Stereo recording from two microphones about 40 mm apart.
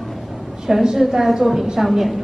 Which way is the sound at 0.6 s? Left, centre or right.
Centre.